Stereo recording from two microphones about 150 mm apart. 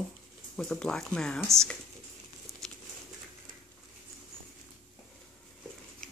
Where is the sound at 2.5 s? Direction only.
20° right (ahead or behind).